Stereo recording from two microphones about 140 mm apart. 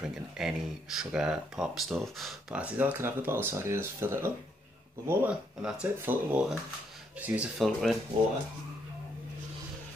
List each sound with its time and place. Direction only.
0.0 s speech: 5° right (ahead or behind)
2.6 s speech: 15° right (ahead or behind)
7.5 s speech: centre (ahead or behind)